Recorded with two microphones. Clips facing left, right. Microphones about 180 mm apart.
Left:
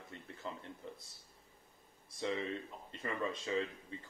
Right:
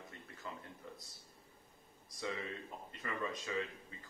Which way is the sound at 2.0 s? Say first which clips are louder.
Left 4 dB; 25° left (ahead or behind).